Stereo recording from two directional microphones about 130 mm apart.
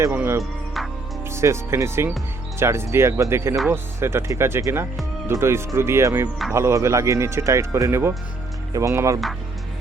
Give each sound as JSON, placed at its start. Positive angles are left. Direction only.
{"t": 0.0, "sound": "speech", "side_deg": -20}